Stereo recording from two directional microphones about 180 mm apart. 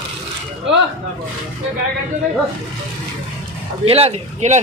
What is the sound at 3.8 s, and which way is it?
Speech, 35° right (ahead or behind).